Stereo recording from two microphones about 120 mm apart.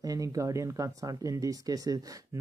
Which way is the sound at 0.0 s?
30° right (ahead or behind).